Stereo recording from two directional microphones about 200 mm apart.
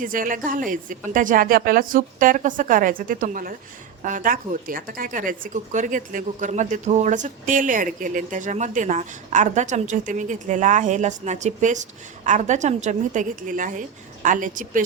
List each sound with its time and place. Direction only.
0.0 s a woman's voice: 45° right (ahead or behind)